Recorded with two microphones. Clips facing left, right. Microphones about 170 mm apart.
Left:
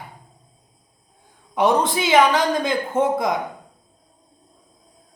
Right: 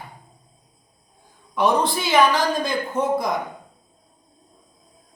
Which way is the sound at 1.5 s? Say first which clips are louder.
Left 2 dB; 20° left (ahead or behind).